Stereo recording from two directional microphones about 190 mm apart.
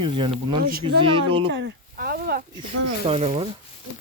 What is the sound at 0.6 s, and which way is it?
Speech, 50° right (ahead or behind).